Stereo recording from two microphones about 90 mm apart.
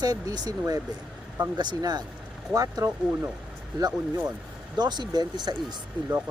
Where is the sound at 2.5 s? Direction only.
40° right (ahead or behind).